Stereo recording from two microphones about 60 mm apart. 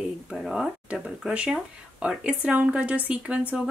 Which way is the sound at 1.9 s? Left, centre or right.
Centre.